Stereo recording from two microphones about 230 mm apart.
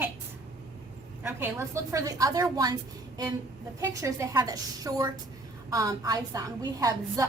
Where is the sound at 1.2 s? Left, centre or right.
Centre.